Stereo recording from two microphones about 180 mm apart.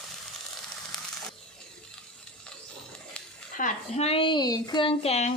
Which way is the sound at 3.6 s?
40° left (ahead or behind).